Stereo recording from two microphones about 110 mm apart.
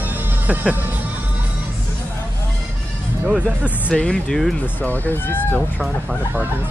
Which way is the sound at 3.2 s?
10° right (ahead or behind).